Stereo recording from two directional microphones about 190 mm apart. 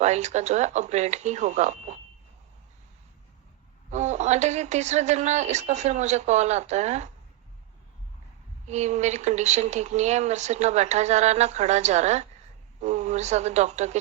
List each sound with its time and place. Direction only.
0.0 s speech: 35° right (ahead or behind)
3.9 s speech: 35° right (ahead or behind)
8.6 s speech: 35° right (ahead or behind)